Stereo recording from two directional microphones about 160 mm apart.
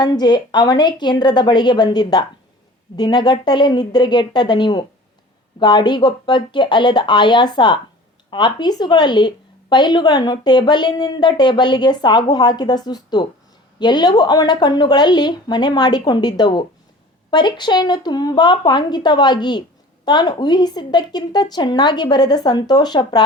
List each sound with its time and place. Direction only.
0.0 s a woman's voice: 25° left (ahead or behind)